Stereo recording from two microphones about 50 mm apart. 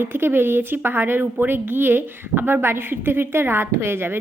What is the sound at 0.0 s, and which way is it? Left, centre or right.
A woman's voice, right.